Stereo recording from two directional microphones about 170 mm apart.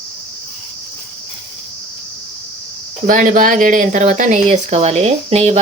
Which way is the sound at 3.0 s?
50° right (ahead or behind).